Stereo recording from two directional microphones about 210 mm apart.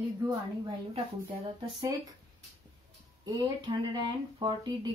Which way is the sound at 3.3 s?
20° right (ahead or behind).